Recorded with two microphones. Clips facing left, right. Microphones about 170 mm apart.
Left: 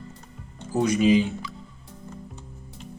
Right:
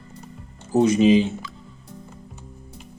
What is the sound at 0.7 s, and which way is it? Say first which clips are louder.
Speech: right 4 dB; 25° right (ahead or behind).